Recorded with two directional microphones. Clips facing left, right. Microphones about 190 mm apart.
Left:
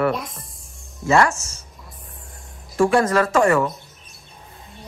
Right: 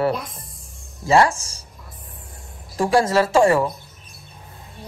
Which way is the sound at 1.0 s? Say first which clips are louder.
Right 1 dB; 35° right (ahead or behind).